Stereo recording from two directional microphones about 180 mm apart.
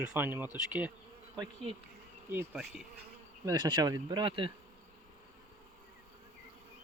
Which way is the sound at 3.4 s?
20° right (ahead or behind).